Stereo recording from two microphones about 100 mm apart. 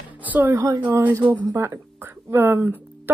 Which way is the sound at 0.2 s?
20° right (ahead or behind).